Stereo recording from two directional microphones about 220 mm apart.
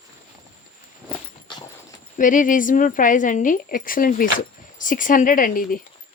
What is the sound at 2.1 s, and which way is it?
Speech, 35° left (ahead or behind).